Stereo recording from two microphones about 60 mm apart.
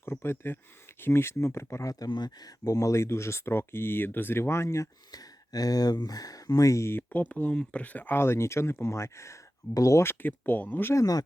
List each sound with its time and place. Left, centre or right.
0.0 s speech: left
1.9 s speech: left
5.1 s speech: left
7.1 s speech: left
8.2 s speech: left
10.0 s speech: left
10.9 s speech: left